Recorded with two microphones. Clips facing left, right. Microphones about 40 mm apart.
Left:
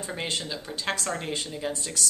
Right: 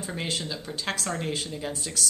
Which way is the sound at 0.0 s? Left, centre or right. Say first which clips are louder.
Even; centre.